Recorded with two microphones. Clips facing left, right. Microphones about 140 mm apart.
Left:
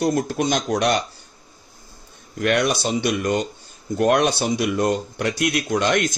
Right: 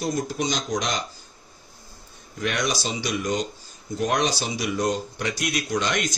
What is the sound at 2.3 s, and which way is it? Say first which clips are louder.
Speech: left 6 dB; 60° left (ahead or behind).